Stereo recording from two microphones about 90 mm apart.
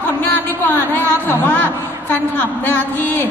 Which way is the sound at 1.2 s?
20° left (ahead or behind).